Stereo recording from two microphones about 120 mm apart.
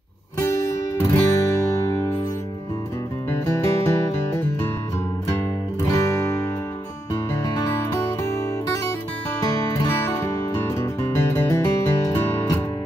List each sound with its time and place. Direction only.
0.4 s music: 25° left (ahead or behind)
3.3 s music: 25° left (ahead or behind)
5.9 s music: 30° left (ahead or behind)
7.4 s music: 25° left (ahead or behind)
9.6 s music: 30° left (ahead or behind)